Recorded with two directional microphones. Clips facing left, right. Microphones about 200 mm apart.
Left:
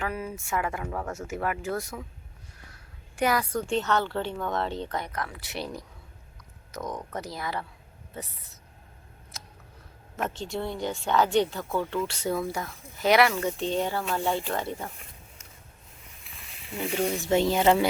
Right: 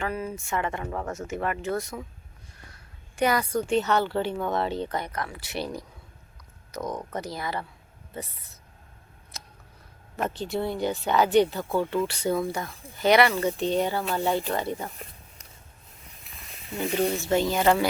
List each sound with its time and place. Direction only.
0.0 s speech: 5° left (ahead or behind)
3.2 s speech: centre (ahead or behind)
9.3 s scissors: centre (ahead or behind)
10.4 s speech: 5° right (ahead or behind)
12.7 s speech: 30° right (ahead or behind)
13.0 s speech: centre (ahead or behind)
16.7 s speech: 5° left (ahead or behind); by 17.8 s 20° left (ahead or behind)